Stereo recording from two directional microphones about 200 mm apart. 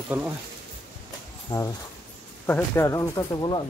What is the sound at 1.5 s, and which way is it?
Speech, 25° left (ahead or behind).